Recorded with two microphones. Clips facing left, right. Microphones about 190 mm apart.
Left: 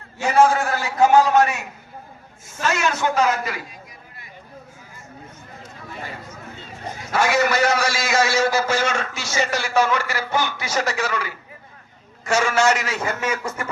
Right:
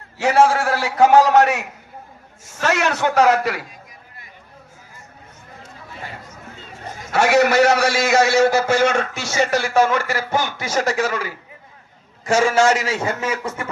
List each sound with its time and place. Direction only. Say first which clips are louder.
0.2 s a man's voice: right 1 dB; 85° right
7.1 s a man's voice: right 4 dB; 65° right (ahead or behind); by 13.7 s 30° right (ahead or behind)